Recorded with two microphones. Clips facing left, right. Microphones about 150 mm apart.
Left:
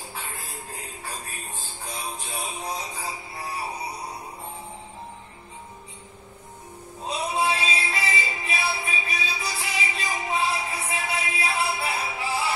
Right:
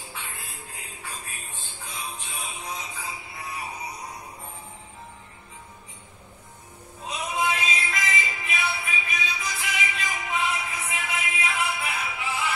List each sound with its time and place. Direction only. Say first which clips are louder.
0.1 s music: left 2 dB; 40° left (ahead or behind)
7.0 s music: left 2 dB; 30° left (ahead or behind)